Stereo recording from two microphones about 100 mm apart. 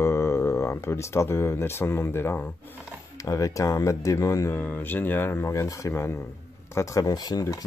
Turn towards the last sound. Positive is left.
turn(degrees=40)  # may be behind; listen again after turning